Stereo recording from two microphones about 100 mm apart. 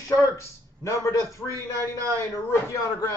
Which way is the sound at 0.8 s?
30° left (ahead or behind).